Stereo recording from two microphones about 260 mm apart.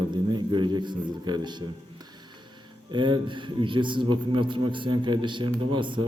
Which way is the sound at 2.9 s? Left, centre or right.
Centre.